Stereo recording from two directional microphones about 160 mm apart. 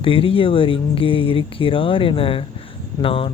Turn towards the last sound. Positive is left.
turn(degrees=35)  # may be behind; listen again after turning